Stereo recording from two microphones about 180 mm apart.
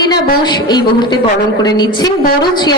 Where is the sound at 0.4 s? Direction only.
25° left (ahead or behind).